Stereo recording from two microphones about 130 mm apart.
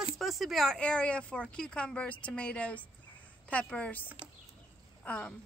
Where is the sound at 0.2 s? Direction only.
Centre (ahead or behind).